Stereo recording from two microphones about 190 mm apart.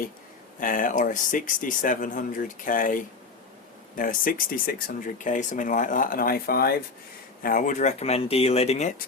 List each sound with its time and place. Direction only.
0.6 s speech: 45° left (ahead or behind)